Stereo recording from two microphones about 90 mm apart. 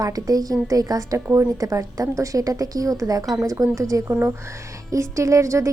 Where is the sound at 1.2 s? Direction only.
30° right (ahead or behind).